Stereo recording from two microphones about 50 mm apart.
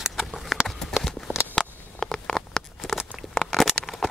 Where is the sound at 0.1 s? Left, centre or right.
Centre.